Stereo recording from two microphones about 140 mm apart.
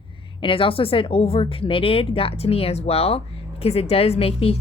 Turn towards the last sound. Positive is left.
turn(degrees=45)  # may be behind; listen again after turning